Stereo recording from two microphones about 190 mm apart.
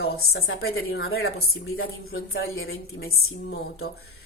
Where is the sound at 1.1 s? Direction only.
60° left (ahead or behind); by 3.8 s 90° left.